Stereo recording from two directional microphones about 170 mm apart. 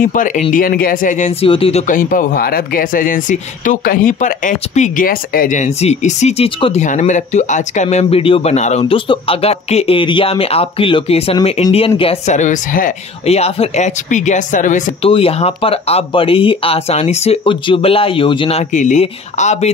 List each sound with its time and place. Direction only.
0.0 s speech: 50° left (ahead or behind)
1.5 s speech: 35° left (ahead or behind)
2.0 s speech: 55° left (ahead or behind)
13.2 s speech: 35° left (ahead or behind)
15.0 s speech: 35° left (ahead or behind)